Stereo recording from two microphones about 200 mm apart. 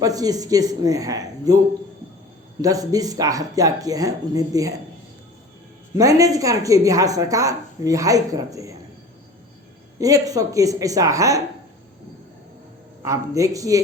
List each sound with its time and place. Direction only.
0.0 s a woman's voice: 20° right (ahead or behind)
6.0 s a woman's voice: 15° right (ahead or behind)
10.0 s a woman's voice: 15° right (ahead or behind)
13.1 s a woman's voice: 15° right (ahead or behind)